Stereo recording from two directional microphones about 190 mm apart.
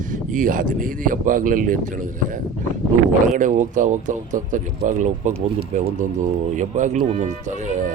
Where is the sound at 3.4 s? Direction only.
40° right (ahead or behind).